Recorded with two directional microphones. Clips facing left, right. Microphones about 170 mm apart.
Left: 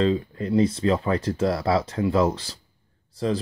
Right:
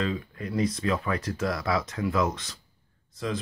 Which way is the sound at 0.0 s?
30° left (ahead or behind).